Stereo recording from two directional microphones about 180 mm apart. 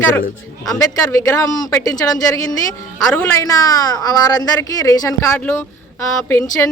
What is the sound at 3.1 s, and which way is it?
A woman's voice, 15° left (ahead or behind).